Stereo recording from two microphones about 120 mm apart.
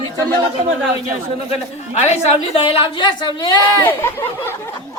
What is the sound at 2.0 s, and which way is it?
A woman's voice, 55° left (ahead or behind).